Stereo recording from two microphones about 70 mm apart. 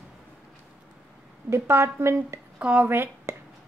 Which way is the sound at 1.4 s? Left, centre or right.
Right.